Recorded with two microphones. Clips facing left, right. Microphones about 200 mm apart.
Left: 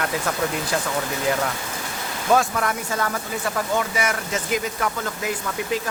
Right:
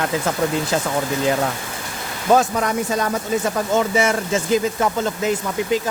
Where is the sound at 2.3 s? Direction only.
20° right (ahead or behind).